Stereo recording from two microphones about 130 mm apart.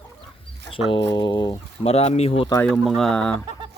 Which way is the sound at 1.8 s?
50° left (ahead or behind).